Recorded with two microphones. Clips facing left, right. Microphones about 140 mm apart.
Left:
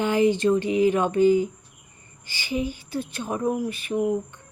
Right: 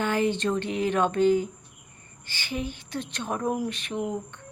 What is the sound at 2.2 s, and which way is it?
Speech, 10° left (ahead or behind).